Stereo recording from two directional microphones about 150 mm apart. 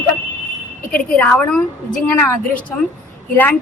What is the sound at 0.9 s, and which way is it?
A woman's voice, 5° left (ahead or behind).